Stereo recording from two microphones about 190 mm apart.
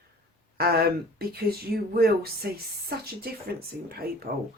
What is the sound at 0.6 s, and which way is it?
Speech, 55° right (ahead or behind).